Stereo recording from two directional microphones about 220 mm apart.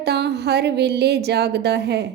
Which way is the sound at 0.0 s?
50° right (ahead or behind).